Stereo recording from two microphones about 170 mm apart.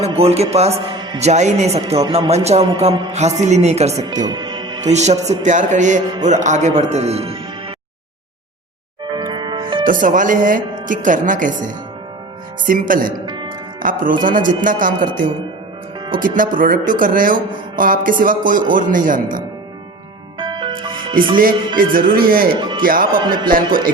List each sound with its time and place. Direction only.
0.0 s speech: 35° right (ahead or behind)
4.0 s music: 25° right (ahead or behind)
4.8 s speech: 40° right (ahead or behind)
9.1 s music: 25° right (ahead or behind)
9.8 s speech: 50° right (ahead or behind)
13.2 s music: 25° right (ahead or behind)
13.8 s speech: 55° right (ahead or behind)
14.9 s speech: 30° right (ahead or behind)
16.2 s speech: 50° right (ahead or behind)
20.4 s music: 25° right (ahead or behind)
21.8 s speech: 55° right (ahead or behind)
22.5 s speech: 25° right (ahead or behind)
22.8 s speech: 55° right (ahead or behind)
23.1 s speech: 25° right (ahead or behind)